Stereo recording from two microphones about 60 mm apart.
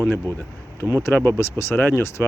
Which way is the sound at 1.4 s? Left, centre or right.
Left.